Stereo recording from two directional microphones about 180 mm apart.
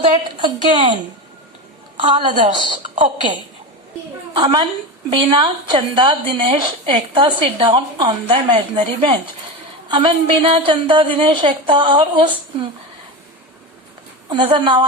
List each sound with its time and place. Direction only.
0.0 s a woman's voice: 25° right (ahead or behind)
2.0 s a woman's voice: 25° right (ahead or behind)
4.4 s a woman's voice: 25° right (ahead or behind)
14.3 s a woman's voice: 25° right (ahead or behind)